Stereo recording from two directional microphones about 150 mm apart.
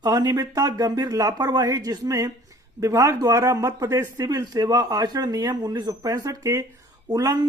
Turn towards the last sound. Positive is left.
turn(degrees=-25)  # may be behind; listen again after turning